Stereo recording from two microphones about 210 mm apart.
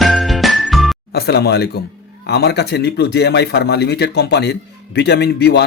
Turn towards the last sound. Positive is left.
turn(degrees=50)  # may be behind; listen again after turning